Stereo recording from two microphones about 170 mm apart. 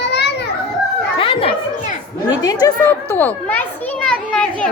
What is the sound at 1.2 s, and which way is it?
Chatter, 30° left (ahead or behind).